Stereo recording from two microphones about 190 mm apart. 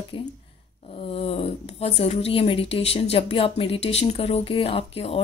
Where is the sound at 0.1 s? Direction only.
25° left (ahead or behind).